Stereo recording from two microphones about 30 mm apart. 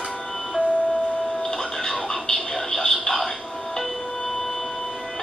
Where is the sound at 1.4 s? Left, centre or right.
Left.